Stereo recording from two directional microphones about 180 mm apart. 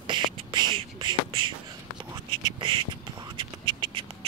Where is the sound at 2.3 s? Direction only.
25° right (ahead or behind).